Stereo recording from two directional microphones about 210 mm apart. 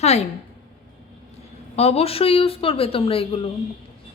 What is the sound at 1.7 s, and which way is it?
A woman's voice, 30° left (ahead or behind).